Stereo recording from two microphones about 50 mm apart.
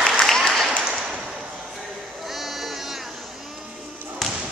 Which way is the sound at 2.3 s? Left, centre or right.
Centre.